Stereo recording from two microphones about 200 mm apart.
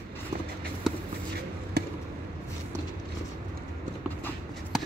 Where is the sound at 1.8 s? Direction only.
50° right (ahead or behind).